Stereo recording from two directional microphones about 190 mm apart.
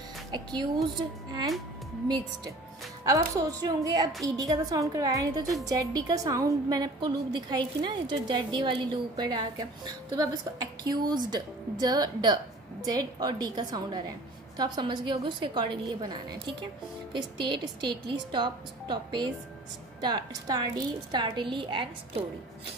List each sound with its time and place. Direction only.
0.3 s a woman's voice: 25° right (ahead or behind)
2.0 s a woman's voice: 20° right (ahead or behind)